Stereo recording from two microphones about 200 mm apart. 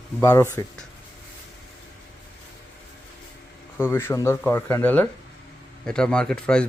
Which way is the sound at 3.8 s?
10° left (ahead or behind).